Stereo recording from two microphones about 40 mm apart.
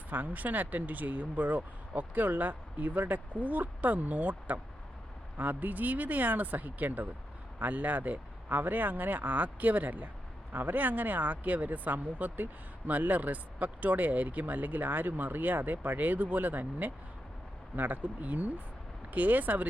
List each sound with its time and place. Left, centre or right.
0.1 s speech: right